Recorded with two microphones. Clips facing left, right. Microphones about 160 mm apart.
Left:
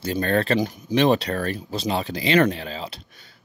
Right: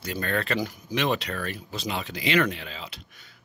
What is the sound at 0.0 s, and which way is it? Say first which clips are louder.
Speech: left 7 dB; 30° left (ahead or behind).